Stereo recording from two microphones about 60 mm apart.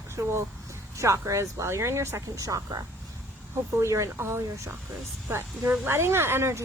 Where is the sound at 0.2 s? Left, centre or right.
Right.